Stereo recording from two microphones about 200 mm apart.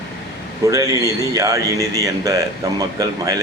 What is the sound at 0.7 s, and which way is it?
Speech, 15° right (ahead or behind).